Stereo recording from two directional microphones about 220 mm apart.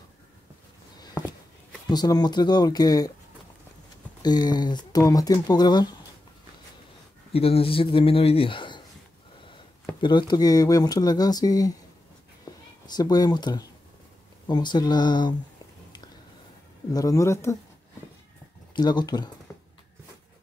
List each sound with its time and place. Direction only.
0.9 s a sound: 20° left (ahead or behind)
1.9 s speech: 20° left (ahead or behind)
4.2 s speech: 20° left (ahead or behind)
7.3 s speech: 25° left (ahead or behind)
10.0 s speech: 20° left (ahead or behind)
16.9 s speech: 15° left (ahead or behind)
18.8 s speech: 20° left (ahead or behind)